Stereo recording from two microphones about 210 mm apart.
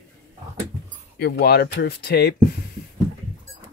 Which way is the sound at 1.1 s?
50° left (ahead or behind).